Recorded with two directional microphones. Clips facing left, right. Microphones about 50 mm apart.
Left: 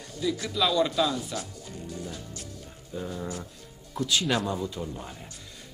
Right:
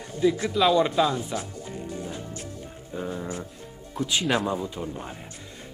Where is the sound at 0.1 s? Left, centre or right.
Right.